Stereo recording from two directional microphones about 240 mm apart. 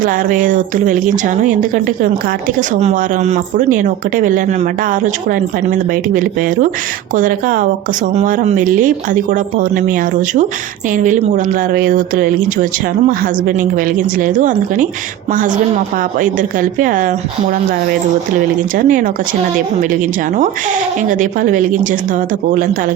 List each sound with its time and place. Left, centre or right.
0.0 s speech: right
13.6 s speech: right
18.8 s speech: right
21.1 s speech: right